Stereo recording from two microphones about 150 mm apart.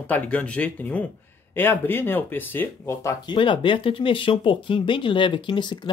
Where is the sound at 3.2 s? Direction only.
35° left (ahead or behind).